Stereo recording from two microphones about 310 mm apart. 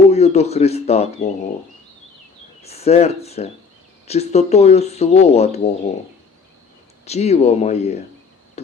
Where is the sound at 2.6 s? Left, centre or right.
Centre.